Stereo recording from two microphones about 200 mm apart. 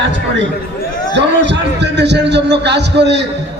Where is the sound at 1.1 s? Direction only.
60° right (ahead or behind).